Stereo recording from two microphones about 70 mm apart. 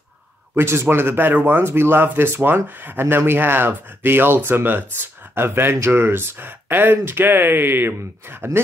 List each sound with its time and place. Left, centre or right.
0.6 s speech: right